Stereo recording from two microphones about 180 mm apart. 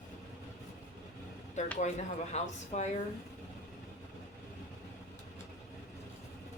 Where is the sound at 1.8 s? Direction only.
40° left (ahead or behind).